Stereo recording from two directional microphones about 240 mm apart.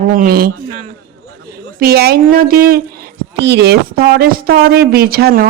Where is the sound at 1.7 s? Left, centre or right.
Right.